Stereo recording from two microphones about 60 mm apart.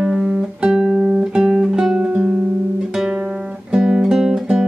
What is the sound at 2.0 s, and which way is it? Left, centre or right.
Music, right.